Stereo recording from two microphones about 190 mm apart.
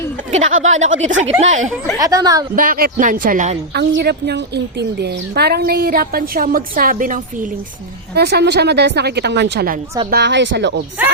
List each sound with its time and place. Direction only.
0.3 s speech: 35° right (ahead or behind)
2.0 s a woman's voice: 20° right (ahead or behind)
2.6 s a woman's voice: 50° right (ahead or behind)
3.8 s a woman's voice: 60° right (ahead or behind)
8.1 s a woman's voice: 60° right (ahead or behind)